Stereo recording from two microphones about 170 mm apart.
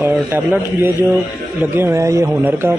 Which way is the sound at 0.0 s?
10° right (ahead or behind).